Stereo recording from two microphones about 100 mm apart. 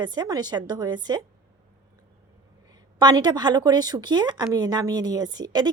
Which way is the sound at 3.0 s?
45° right (ahead or behind).